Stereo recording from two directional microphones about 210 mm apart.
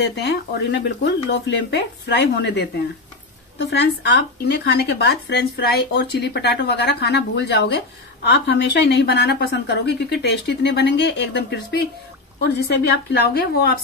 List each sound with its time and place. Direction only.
0.0 s speech: 55° left (ahead or behind)